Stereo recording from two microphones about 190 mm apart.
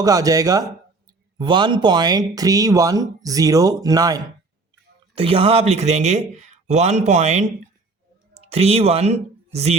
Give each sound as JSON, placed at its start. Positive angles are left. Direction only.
{"t": 0.0, "sound": "speech", "side_deg": -20}
{"t": 5.1, "sound": "speech", "side_deg": -30}